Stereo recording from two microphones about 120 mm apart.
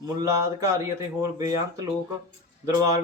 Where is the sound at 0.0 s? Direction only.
30° right (ahead or behind).